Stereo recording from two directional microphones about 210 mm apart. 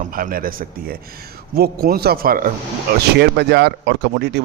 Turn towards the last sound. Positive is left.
turn(degrees=-55)  # may be behind; listen again after turning